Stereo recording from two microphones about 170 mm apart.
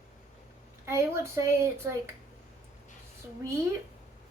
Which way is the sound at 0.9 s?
15° right (ahead or behind).